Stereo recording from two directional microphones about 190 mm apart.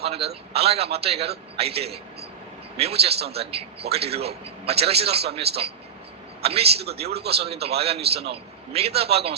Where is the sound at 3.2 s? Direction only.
60° right (ahead or behind).